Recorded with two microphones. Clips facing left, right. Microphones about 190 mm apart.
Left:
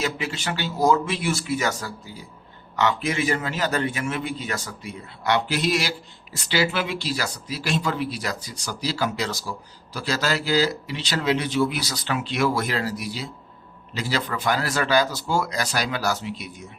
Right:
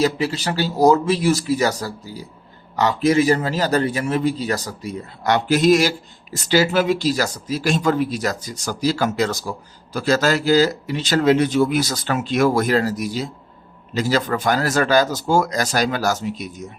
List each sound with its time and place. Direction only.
0.0 s a man's voice: 35° right (ahead or behind)